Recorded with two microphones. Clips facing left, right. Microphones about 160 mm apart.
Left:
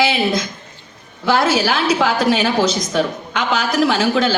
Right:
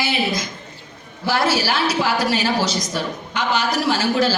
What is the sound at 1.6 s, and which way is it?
Speech, 90° left.